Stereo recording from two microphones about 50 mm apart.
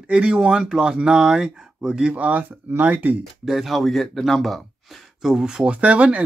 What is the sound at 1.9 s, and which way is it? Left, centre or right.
Speech, right.